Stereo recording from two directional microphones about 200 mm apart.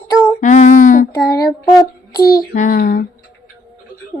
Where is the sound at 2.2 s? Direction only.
45° left (ahead or behind).